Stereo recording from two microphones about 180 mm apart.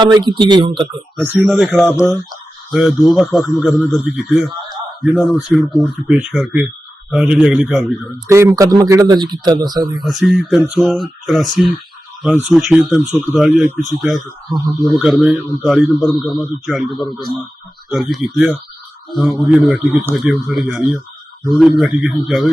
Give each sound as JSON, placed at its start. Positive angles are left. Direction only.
{"t": 0.0, "sound": "speech", "side_deg": -25}
{"t": 1.1, "sound": "speech", "side_deg": -5}
{"t": 1.8, "sound": "speech", "side_deg": 15}
{"t": 2.7, "sound": "speech", "side_deg": 0}
{"t": 8.3, "sound": "speech", "side_deg": -15}
{"t": 10.0, "sound": "speech", "side_deg": 0}